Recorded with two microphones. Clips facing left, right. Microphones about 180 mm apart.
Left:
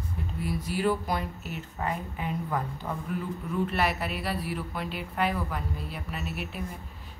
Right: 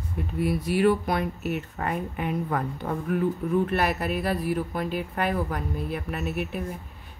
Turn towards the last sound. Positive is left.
turn(degrees=-55)  # may be behind; listen again after turning